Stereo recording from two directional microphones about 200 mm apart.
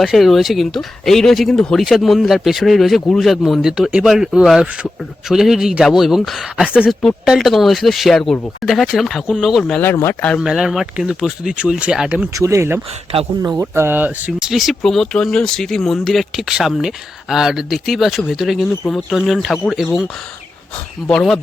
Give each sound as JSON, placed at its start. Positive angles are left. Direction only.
{"t": 0.0, "sound": "speech", "side_deg": 0}
{"t": 13.1, "sound": "speech", "side_deg": -30}
{"t": 13.5, "sound": "speech", "side_deg": -15}
{"t": 21.1, "sound": "speech", "side_deg": 5}